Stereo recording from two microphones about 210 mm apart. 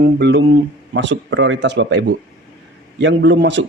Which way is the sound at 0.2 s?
55° right (ahead or behind).